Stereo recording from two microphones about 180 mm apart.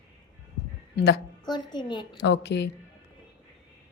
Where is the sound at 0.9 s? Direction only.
65° left (ahead or behind).